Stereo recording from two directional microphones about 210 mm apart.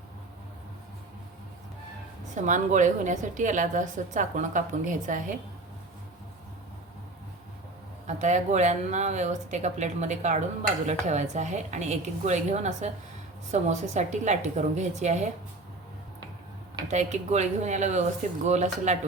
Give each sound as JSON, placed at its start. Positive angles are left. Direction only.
{"t": 2.3, "sound": "speech", "side_deg": -35}
{"t": 8.0, "sound": "speech", "side_deg": -35}
{"t": 16.9, "sound": "speech", "side_deg": -35}